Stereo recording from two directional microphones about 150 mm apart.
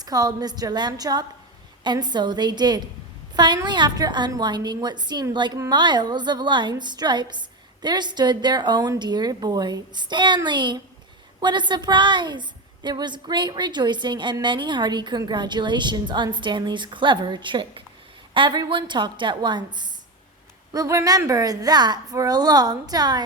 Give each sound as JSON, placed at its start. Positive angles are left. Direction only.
{"t": 0.0, "sound": "a woman's voice", "side_deg": -25}